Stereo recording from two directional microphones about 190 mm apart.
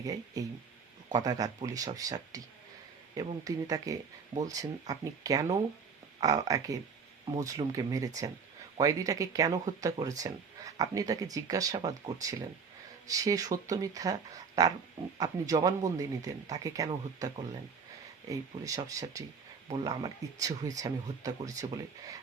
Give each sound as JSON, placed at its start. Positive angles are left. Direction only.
{"t": 0.0, "sound": "speech", "side_deg": -20}
{"t": 3.4, "sound": "speech", "side_deg": -20}
{"t": 18.3, "sound": "speech", "side_deg": -15}